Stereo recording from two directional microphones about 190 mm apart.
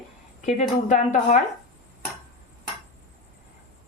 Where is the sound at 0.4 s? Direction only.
40° left (ahead or behind).